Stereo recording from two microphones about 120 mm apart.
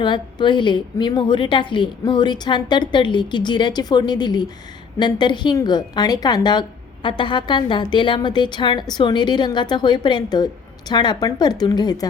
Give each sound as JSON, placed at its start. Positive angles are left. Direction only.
{"t": 0.0, "sound": "a woman's voice", "side_deg": 40}